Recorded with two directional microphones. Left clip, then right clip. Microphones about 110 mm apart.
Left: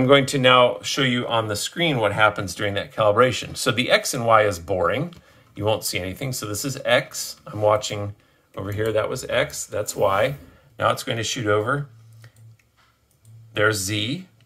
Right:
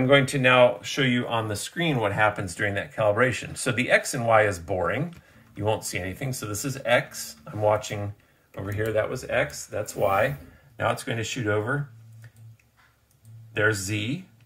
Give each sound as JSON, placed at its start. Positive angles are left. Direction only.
{"t": 0.0, "sound": "speech", "side_deg": 35}
{"t": 1.8, "sound": "speech", "side_deg": 20}
{"t": 3.1, "sound": "speech", "side_deg": 25}
{"t": 13.5, "sound": "speech", "side_deg": 20}